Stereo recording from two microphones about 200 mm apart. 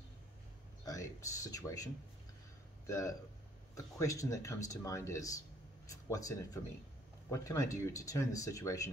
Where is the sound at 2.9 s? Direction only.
15° left (ahead or behind).